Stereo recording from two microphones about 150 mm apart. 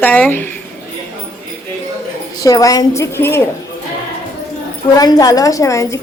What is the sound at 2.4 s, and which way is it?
A woman's voice, 25° left (ahead or behind).